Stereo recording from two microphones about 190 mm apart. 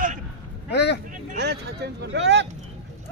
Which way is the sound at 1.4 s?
60° right (ahead or behind).